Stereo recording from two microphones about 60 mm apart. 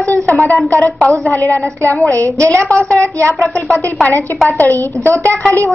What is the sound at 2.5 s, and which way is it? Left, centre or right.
A woman's voice, centre.